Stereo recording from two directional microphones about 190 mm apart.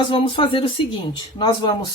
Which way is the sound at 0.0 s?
25° left (ahead or behind).